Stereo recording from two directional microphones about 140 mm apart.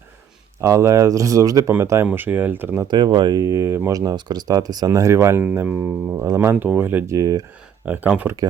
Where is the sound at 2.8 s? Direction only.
35° right (ahead or behind).